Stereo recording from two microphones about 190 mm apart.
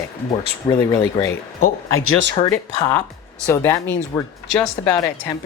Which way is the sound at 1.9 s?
85° right.